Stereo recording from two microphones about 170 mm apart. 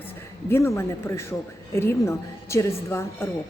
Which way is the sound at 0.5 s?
15° left (ahead or behind).